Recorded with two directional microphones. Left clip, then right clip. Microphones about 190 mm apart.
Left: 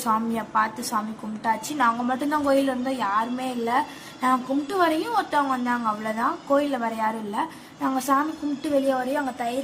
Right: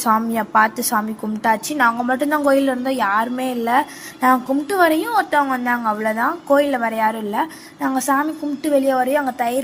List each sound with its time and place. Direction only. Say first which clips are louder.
0.0 s a woman's voice: right 7 dB; 30° right (ahead or behind)